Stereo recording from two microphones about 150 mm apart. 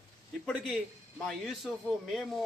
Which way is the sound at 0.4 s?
5° left (ahead or behind).